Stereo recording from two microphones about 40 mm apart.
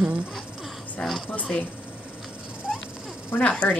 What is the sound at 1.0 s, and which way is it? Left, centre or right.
Speech, centre.